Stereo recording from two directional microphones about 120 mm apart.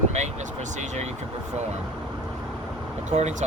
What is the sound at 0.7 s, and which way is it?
Speech, 75° right (ahead or behind).